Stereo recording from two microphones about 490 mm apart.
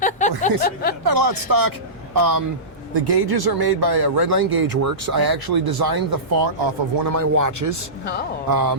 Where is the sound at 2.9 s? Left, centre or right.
Right.